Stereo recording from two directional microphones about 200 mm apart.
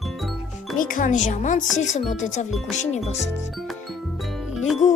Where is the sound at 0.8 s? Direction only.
40° left (ahead or behind).